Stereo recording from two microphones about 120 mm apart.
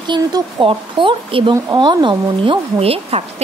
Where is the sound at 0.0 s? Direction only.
40° right (ahead or behind).